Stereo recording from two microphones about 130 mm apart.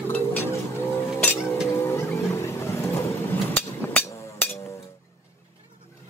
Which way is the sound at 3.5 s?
15° left (ahead or behind).